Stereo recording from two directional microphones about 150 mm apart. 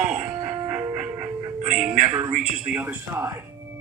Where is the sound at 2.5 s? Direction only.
5° right (ahead or behind).